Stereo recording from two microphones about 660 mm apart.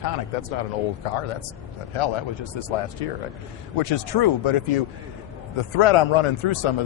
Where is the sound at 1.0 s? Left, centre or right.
Left.